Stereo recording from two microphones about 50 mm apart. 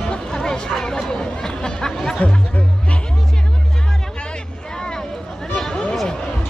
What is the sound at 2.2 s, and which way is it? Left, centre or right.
Music, left.